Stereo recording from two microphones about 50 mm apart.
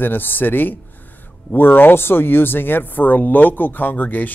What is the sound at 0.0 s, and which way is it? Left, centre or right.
Speech, left.